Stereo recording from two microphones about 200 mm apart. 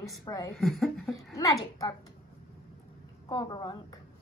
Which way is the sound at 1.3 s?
15° left (ahead or behind).